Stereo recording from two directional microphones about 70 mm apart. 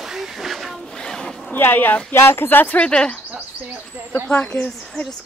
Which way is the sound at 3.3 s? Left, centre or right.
Right.